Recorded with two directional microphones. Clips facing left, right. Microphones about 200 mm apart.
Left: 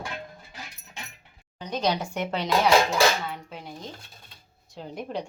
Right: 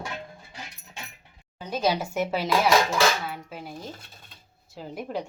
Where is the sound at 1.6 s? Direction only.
5° right (ahead or behind).